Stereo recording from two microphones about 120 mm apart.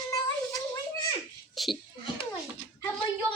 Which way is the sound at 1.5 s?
Centre (ahead or behind).